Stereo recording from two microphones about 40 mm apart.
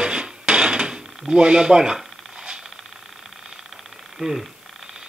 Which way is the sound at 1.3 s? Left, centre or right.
Centre.